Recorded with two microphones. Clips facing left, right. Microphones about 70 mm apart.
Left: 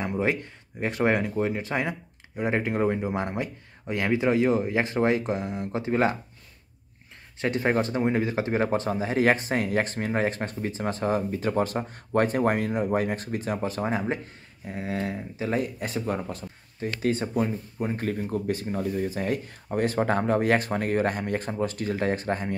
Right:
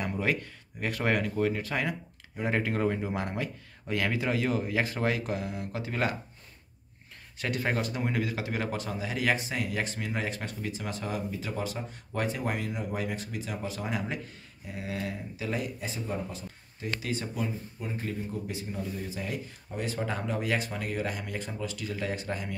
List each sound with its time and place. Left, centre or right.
0.0 s speech: left
7.3 s speech: left
15.8 s speech: left